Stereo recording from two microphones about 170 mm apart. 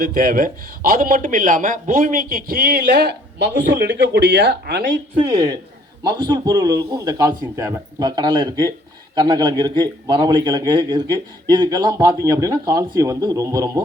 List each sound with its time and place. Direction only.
0.0 s a man's voice: 60° right (ahead or behind)
6.0 s a man's voice: 25° right (ahead or behind)